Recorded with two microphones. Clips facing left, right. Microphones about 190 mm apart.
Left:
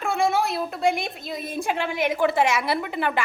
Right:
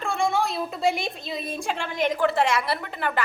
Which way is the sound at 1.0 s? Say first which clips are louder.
Even; 50° left (ahead or behind).